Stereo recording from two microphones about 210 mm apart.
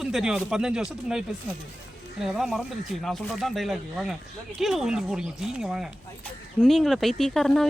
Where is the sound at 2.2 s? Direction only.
Centre (ahead or behind).